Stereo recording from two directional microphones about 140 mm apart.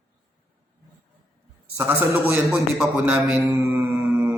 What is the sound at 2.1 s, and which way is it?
Mantra, 15° right (ahead or behind).